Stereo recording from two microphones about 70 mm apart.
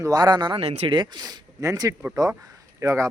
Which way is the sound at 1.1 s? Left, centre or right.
Right.